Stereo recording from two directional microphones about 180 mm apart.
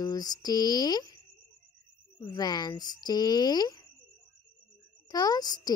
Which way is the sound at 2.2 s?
20° left (ahead or behind).